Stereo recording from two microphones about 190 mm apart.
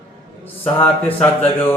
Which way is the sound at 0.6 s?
10° left (ahead or behind).